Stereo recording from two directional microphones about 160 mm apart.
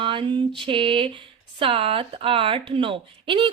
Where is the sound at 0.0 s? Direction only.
30° right (ahead or behind).